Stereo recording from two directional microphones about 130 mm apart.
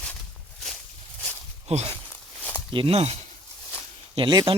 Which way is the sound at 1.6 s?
55° right (ahead or behind).